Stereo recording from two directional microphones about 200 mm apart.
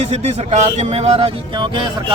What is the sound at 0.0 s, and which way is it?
A man's voice, 30° right (ahead or behind).